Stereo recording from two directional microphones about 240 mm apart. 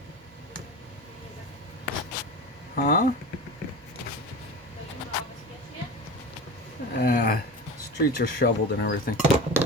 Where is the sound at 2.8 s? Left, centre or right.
Left.